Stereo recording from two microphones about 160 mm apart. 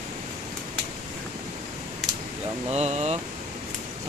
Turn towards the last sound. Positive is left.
turn(degrees=-45)  # may be behind; listen again after turning